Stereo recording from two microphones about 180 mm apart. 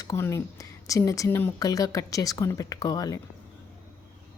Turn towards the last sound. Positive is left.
turn(degrees=20)  # may be behind; listen again after turning